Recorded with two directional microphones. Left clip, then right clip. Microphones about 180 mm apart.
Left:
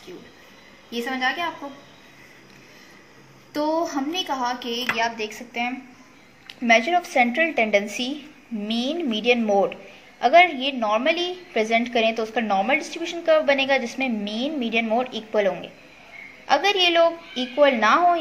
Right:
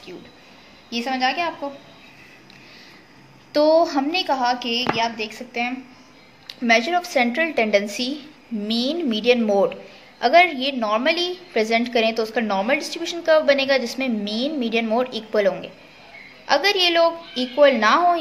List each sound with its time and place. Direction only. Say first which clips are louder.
0.8 s a woman's voice: right 3 dB; 25° right (ahead or behind)
3.5 s a woman's voice: right 7 dB; 35° right (ahead or behind)
5.0 s a woman's voice: right 1 dB; 15° right (ahead or behind)
5.5 s a woman's voice: right 3 dB; 5° right (ahead or behind)